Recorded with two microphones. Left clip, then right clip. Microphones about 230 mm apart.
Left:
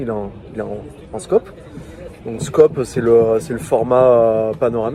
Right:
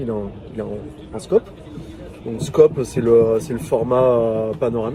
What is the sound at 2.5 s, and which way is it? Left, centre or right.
Speech, left.